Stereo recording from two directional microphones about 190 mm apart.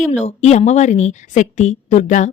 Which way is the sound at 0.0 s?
35° left (ahead or behind).